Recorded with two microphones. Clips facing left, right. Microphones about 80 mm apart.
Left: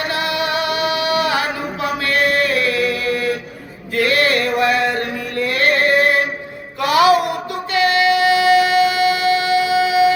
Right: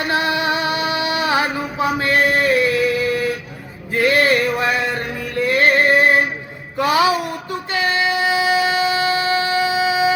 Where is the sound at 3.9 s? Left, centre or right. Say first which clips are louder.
Right 1 dB; right.